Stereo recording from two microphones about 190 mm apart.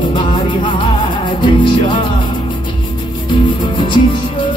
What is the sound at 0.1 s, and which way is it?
Music, 25° left (ahead or behind).